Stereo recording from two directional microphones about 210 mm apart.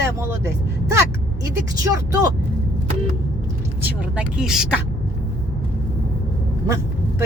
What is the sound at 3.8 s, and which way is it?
Speech, 5° right (ahead or behind).